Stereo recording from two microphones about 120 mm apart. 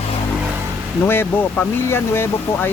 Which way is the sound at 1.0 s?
20° left (ahead or behind).